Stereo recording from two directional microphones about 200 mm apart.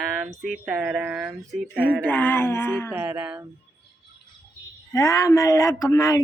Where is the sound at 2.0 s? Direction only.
10° left (ahead or behind).